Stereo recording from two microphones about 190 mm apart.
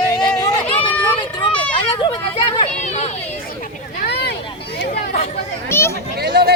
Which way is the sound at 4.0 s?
60° left (ahead or behind).